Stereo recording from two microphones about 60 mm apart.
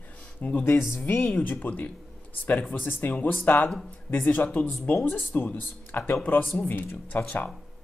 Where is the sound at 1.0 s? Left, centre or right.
Left.